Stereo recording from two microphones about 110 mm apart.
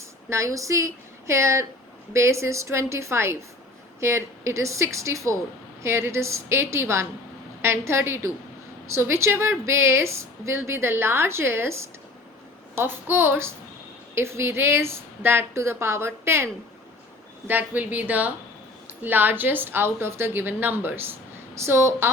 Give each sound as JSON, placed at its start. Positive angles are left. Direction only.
{"t": 0.3, "sound": "a woman's voice", "side_deg": -25}
{"t": 17.5, "sound": "a woman's voice", "side_deg": -15}